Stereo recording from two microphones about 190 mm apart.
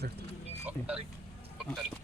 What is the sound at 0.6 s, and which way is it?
Speech, 5° right (ahead or behind).